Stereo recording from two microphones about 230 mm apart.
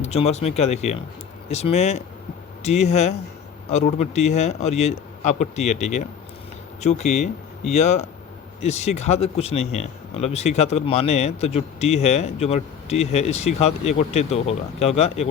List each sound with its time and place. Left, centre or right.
0.0 s speech: left